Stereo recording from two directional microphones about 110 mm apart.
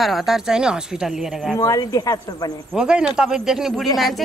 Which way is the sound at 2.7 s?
5° right (ahead or behind).